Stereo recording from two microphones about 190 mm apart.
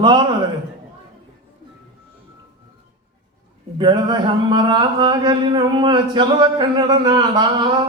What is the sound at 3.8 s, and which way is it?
Speech, 25° right (ahead or behind).